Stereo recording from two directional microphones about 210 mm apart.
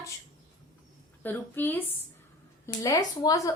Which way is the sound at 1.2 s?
10° left (ahead or behind).